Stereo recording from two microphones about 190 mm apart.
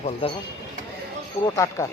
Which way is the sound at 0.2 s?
30° left (ahead or behind).